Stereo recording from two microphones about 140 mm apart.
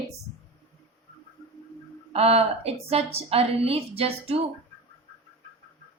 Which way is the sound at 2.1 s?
45° right (ahead or behind).